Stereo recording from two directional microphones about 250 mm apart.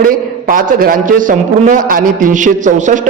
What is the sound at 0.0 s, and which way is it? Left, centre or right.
A man's voice, right.